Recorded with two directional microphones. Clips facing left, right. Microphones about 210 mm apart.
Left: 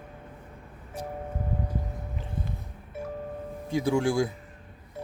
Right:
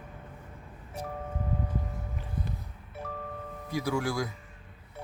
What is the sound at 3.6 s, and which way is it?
Speech, 25° left (ahead or behind).